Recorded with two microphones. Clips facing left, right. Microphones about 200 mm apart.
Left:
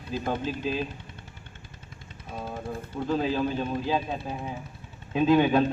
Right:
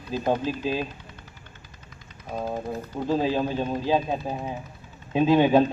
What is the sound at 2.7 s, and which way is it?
Speech, 30° right (ahead or behind).